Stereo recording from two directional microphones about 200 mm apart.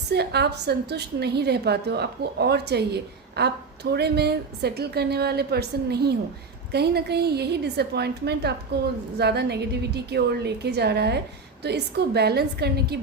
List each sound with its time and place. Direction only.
0.1 s a woman's voice: 55° right (ahead or behind)